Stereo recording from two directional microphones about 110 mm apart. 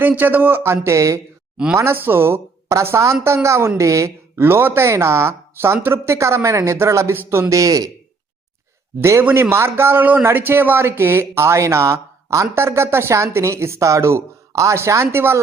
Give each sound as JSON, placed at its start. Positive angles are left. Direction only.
{"t": 0.2, "sound": "speech", "side_deg": -15}
{"t": 9.0, "sound": "speech", "side_deg": -25}